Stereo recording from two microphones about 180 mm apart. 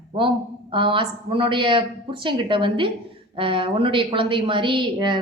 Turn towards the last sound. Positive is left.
turn(degrees=-25)  # may be behind; listen again after turning